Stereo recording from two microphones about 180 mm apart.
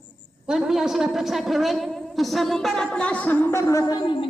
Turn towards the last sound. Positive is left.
turn(degrees=20)  # may be behind; listen again after turning